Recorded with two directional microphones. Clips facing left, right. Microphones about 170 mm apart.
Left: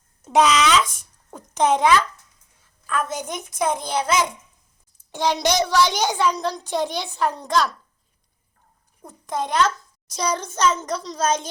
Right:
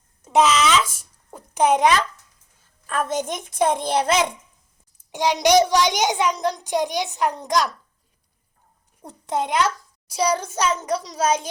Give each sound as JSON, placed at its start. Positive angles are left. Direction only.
{"t": 0.3, "sound": "a child's voice", "side_deg": 0}
{"t": 2.8, "sound": "a child's voice", "side_deg": -25}
{"t": 5.1, "sound": "a child's voice", "side_deg": -15}
{"t": 9.5, "sound": "a child's voice", "side_deg": -10}